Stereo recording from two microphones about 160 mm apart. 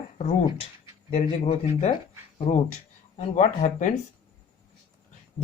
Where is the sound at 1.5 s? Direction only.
55° left (ahead or behind).